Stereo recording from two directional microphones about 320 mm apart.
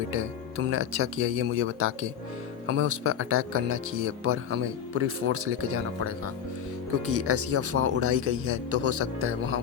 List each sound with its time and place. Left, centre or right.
0.1 s speech: right